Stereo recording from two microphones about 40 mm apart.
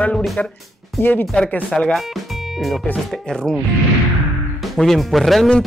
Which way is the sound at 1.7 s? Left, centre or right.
Centre.